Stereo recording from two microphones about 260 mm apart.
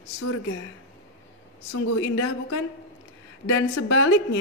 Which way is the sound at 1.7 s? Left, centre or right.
Left.